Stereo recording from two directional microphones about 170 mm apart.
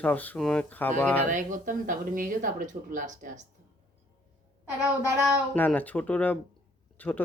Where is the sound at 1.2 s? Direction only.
50° right (ahead or behind).